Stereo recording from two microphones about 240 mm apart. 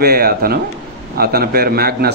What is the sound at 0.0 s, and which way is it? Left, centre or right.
Speech, right.